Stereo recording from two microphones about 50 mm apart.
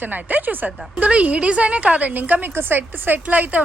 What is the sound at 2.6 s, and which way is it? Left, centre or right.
A woman's voice, right.